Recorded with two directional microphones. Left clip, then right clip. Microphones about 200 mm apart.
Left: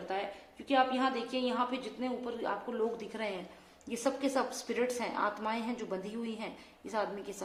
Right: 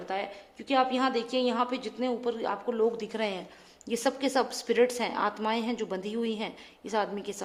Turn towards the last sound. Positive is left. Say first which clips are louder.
# right 5 dB
turn(degrees=-45)  # may be behind; listen again after turning